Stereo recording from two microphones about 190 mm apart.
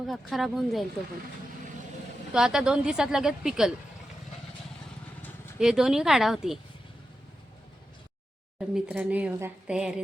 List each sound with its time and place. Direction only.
0.1 s a woman's voice: centre (ahead or behind)
2.3 s a woman's voice: 5° right (ahead or behind)
5.5 s a woman's voice: 5° right (ahead or behind)
8.5 s a woman's voice: 5° right (ahead or behind)